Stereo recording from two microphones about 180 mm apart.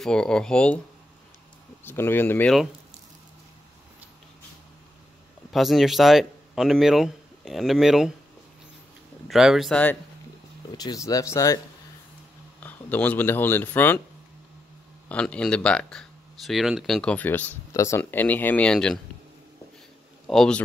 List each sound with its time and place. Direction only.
0.0 s speech: 5° left (ahead or behind)
1.9 s speech: 10° left (ahead or behind)
5.5 s speech: centre (ahead or behind)
9.3 s speech: centre (ahead or behind)
10.7 s speech: 20° left (ahead or behind)
12.6 s speech: 10° left (ahead or behind)
15.0 s speech: 5° left (ahead or behind)
20.2 s a man's voice: 5° left (ahead or behind)